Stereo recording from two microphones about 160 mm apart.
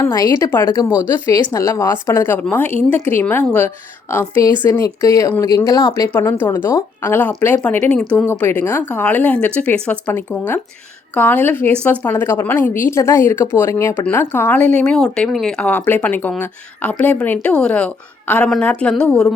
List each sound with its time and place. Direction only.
0.0 s a woman's voice: 25° left (ahead or behind); by 19.3 s 5° left (ahead or behind)